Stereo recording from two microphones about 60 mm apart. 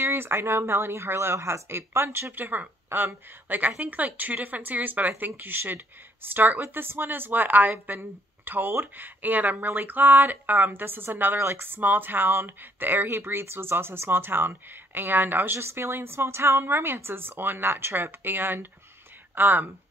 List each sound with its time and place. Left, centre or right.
0.0 s a woman's voice: right